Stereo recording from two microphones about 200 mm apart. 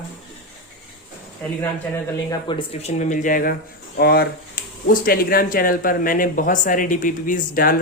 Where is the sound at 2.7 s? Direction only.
30° left (ahead or behind).